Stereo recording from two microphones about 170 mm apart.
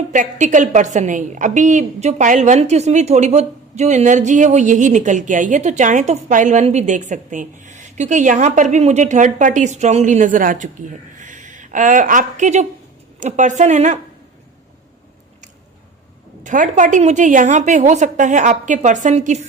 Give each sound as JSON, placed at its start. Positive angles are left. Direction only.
{"t": 0.1, "sound": "a woman's voice", "side_deg": -45}
{"t": 16.4, "sound": "a woman's voice", "side_deg": -50}